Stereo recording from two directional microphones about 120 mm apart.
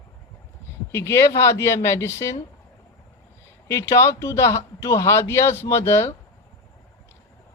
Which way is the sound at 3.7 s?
25° left (ahead or behind).